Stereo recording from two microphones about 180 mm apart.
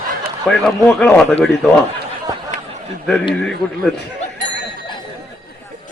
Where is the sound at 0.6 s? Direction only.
5° left (ahead or behind).